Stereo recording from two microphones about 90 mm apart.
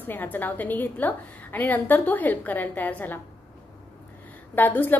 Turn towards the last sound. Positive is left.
turn(degrees=20)  # may be behind; listen again after turning